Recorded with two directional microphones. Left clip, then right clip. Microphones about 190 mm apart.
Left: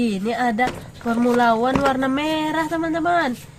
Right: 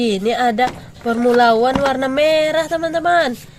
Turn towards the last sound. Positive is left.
turn(degrees=-45)  # may be behind; listen again after turning